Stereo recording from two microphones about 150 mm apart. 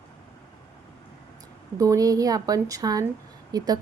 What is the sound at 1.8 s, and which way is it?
A woman's voice, 20° right (ahead or behind).